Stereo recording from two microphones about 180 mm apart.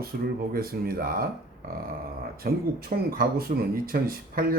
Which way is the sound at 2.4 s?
60° right (ahead or behind).